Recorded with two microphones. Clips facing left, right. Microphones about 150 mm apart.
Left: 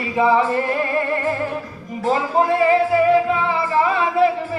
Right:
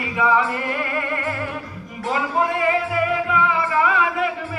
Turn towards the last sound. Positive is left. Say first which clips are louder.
# left 7 dB
turn(degrees=30)  # may be behind; listen again after turning